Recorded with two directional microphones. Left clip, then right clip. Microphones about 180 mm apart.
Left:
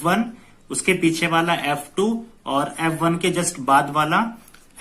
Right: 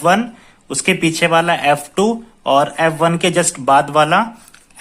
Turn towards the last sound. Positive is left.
turn(degrees=-35)  # may be behind; listen again after turning